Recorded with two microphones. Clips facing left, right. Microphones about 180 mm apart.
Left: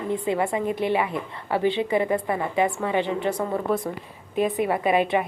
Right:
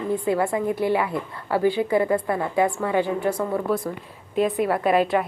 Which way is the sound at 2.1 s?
10° left (ahead or behind).